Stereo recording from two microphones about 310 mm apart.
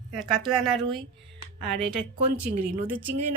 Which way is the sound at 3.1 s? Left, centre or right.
Right.